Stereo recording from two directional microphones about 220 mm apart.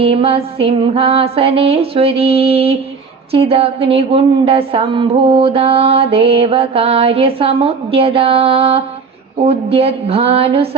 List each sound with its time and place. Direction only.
0.0 s speech: 25° right (ahead or behind)